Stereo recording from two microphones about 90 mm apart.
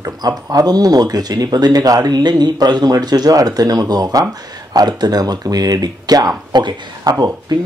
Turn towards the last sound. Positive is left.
turn(degrees=-50)  # may be behind; listen again after turning